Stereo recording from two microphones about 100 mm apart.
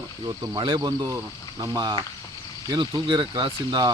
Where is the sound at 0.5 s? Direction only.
55° right (ahead or behind).